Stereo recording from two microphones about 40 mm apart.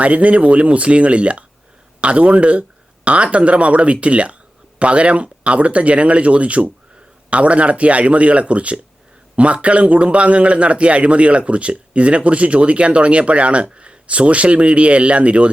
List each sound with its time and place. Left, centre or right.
0.0 s a man's voice: right